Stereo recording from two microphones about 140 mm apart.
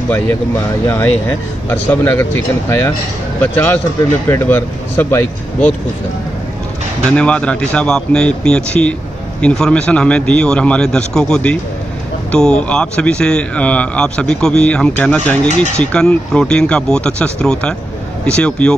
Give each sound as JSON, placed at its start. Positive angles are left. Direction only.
{"t": 0.8, "sound": "speech", "side_deg": 15}
{"t": 7.1, "sound": "speech", "side_deg": 5}